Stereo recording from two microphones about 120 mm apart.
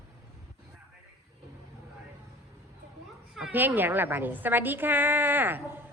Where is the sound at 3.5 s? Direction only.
15° right (ahead or behind).